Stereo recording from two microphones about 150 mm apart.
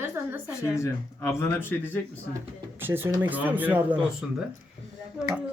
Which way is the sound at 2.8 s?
15° right (ahead or behind).